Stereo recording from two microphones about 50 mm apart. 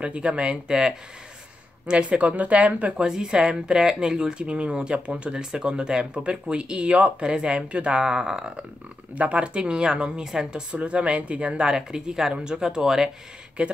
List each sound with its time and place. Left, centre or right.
0.0 s speech: right
3.1 s speech: centre
10.7 s speech: right
13.6 s speech: right